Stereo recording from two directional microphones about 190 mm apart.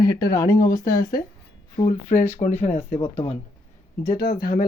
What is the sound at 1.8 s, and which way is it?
Speech, 40° left (ahead or behind).